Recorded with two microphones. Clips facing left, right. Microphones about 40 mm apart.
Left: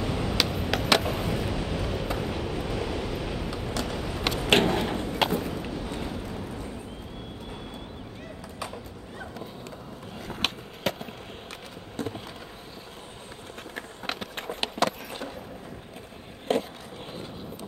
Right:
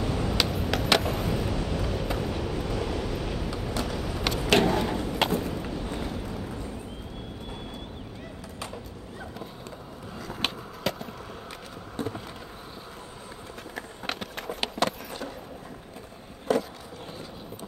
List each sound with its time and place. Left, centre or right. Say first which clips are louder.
0.0 s a sound: even; centre
0.8 s vehicle: even; centre
3.8 s a sound: left 1 dB; centre
4.7 s bird: right 1 dB; left
5.0 s vehicle: even; centre
10.4 s a sound: left 1 dB; centre
14.1 s run: even; centre
14.8 s vehicle: left 1 dB; centre
16.5 s skateboard: right 1 dB; left